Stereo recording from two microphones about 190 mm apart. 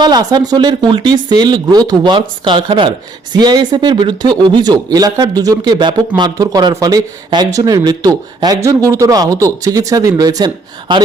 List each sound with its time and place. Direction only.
0.0 s speech: 20° right (ahead or behind)